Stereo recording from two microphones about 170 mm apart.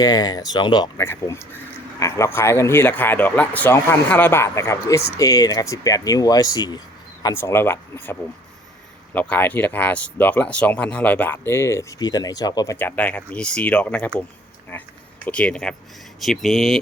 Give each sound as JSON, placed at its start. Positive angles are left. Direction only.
{"t": 0.0, "sound": "speech", "side_deg": 20}
{"t": 1.0, "sound": "speech", "side_deg": 15}
{"t": 12.7, "sound": "speech", "side_deg": 10}